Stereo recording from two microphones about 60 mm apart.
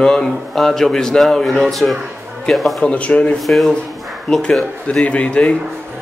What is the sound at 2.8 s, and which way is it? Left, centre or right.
A man's voice, left.